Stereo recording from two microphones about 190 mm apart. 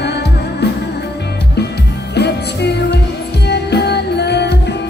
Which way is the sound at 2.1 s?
60° left (ahead or behind).